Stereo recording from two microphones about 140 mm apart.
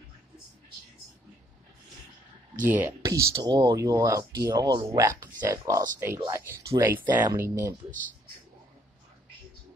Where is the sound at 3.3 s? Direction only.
30° right (ahead or behind).